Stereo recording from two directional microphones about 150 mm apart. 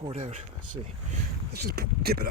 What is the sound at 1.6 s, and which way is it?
Speech, 90° right.